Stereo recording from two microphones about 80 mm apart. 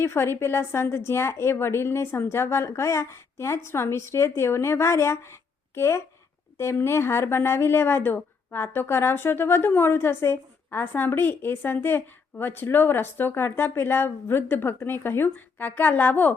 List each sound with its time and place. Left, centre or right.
0.0 s a woman's voice: left